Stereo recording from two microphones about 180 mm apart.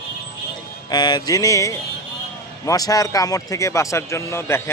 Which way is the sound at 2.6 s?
20° left (ahead or behind).